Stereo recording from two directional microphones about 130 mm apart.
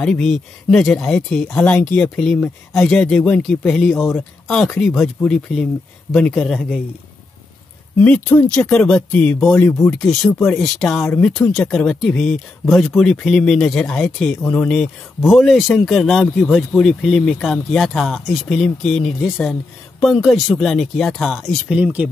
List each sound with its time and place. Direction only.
0.0 s speech: 5° left (ahead or behind)
8.4 s speech: 10° left (ahead or behind)
9.8 s speech: centre (ahead or behind)